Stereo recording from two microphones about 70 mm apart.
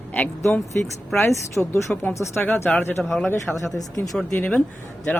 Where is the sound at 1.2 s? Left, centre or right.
Left.